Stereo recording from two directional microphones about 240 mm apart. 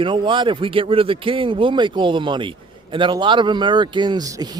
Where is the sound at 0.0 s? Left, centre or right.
Right.